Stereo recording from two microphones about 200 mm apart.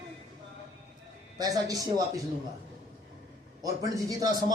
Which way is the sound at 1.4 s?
15° right (ahead or behind).